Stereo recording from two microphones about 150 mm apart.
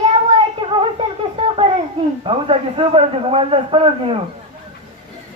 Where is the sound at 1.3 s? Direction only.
40° right (ahead or behind).